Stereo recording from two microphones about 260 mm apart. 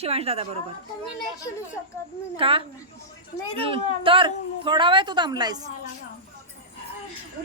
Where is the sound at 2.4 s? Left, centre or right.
Right.